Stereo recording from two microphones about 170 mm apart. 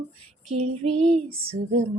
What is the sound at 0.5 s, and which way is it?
Female singing, 40° right (ahead or behind).